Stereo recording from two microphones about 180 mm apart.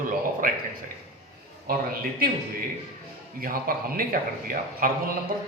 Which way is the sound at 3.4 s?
50° right (ahead or behind).